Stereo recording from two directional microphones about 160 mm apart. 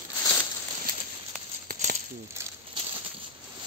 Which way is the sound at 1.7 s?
50° right (ahead or behind).